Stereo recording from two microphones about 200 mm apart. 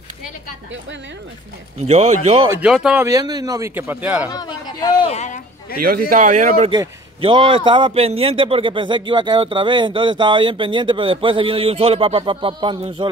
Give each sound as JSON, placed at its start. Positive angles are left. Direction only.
{"t": 1.9, "sound": "a man's voice", "side_deg": -35}
{"t": 2.5, "sound": "speech", "side_deg": -5}
{"t": 3.1, "sound": "a man's voice", "side_deg": -20}
{"t": 4.3, "sound": "a sound", "side_deg": 20}
{"t": 5.1, "sound": "a sound", "side_deg": 35}
{"t": 5.8, "sound": "speech", "side_deg": -45}
{"t": 6.7, "sound": "a man's voice", "side_deg": -25}